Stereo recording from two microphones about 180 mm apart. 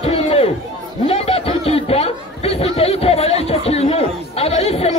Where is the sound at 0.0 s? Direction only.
35° left (ahead or behind).